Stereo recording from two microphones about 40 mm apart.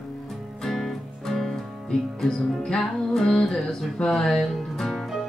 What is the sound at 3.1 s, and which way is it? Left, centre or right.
Speech, centre.